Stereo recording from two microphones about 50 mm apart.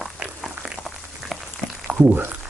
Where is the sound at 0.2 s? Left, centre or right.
Centre.